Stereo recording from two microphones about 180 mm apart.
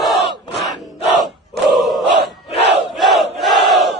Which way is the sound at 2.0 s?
70° right (ahead or behind).